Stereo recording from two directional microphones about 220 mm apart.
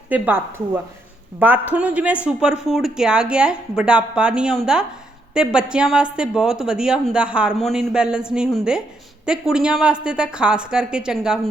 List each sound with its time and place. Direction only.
0.1 s speech: 10° right (ahead or behind)